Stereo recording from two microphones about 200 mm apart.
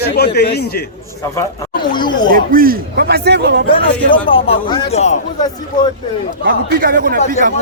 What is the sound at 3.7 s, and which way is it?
Speech, 25° left (ahead or behind).